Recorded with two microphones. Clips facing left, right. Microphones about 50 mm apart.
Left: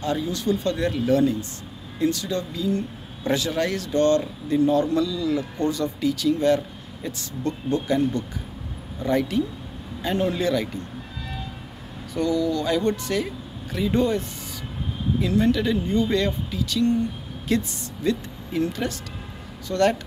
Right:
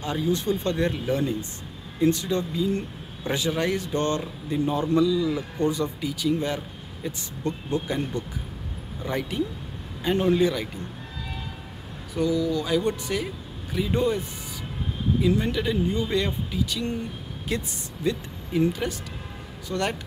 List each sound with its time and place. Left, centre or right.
0.0 s speech: centre
12.1 s a woman's voice: centre